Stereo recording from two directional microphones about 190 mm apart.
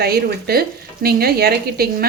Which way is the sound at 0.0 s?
55° right (ahead or behind).